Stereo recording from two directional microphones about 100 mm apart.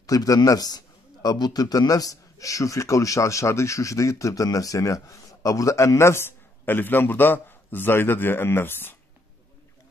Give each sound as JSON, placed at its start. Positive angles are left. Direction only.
{"t": 0.0, "sound": "a man's voice", "side_deg": 35}